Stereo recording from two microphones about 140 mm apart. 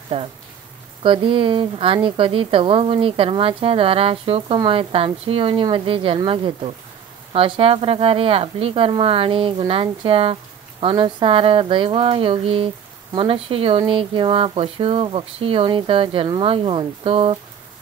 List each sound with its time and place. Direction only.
0.1 s a woman's voice: 45° right (ahead or behind)